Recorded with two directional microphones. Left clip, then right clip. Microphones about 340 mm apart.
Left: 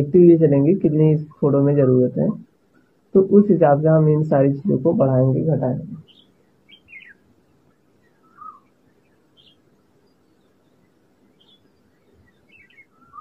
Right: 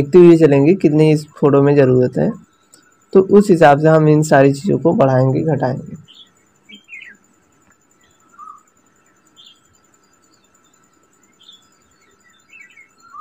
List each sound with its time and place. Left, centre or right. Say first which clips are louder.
0.3 s speech: right 4 dB; right